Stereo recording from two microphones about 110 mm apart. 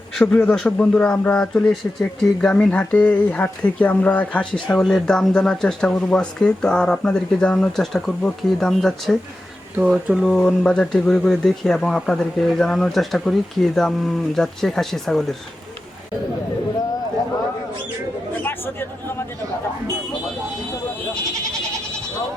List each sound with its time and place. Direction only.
0.2 s speech: 10° left (ahead or behind)
9.7 s speech: 10° right (ahead or behind)
10.3 s speech: 10° left (ahead or behind)
18.4 s chatter: 20° left (ahead or behind)